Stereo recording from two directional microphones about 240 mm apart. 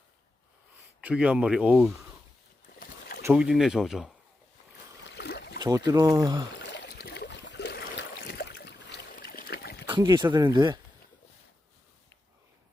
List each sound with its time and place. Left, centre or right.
1.0 s speech: centre
2.7 s boat: left
3.2 s speech: centre
5.0 s boat: left
5.5 s speech: centre
6.6 s a sound: left
9.9 s speech: centre